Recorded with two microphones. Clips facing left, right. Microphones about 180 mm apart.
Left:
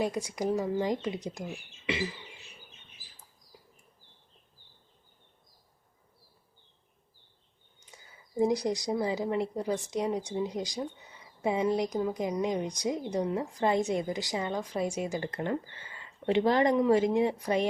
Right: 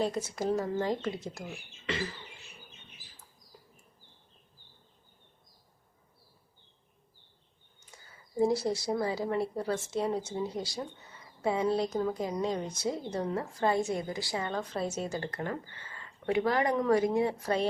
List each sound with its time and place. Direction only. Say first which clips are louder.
0.0 s a woman's voice: left 1 dB; 15° left (ahead or behind)
7.8 s a woman's voice: left 1 dB; 20° left (ahead or behind)